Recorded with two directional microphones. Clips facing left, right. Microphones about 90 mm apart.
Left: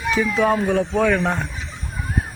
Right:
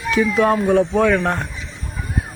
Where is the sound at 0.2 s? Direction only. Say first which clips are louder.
Right 3 dB; 5° right (ahead or behind).